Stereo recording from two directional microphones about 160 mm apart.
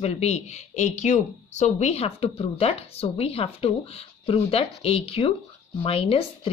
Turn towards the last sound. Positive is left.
turn(degrees=35)  # may be behind; listen again after turning